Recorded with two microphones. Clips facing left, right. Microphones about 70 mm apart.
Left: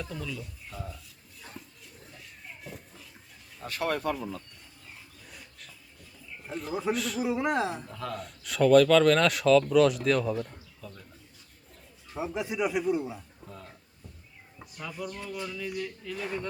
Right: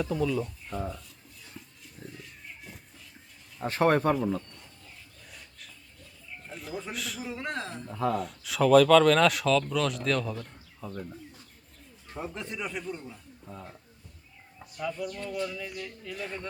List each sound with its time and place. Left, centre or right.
0.0 s speech: centre
0.9 s a sound: centre
3.6 s speech: right
5.3 s wheeze: centre
6.4 s a man's voice: centre
7.3 s speech: centre
8.1 s speech: centre
10.8 s speech: right
12.1 s speech: centre
13.5 s speech: centre
14.8 s speech: centre